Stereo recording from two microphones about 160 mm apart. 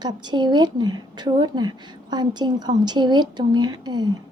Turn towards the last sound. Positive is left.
turn(degrees=-25)  # may be behind; listen again after turning